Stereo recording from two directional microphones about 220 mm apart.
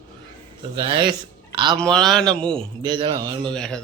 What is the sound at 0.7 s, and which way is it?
A man's voice, 20° right (ahead or behind).